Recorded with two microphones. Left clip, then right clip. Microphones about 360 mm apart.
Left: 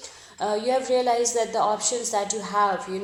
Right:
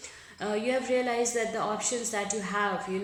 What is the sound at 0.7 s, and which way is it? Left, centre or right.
A woman's voice, centre.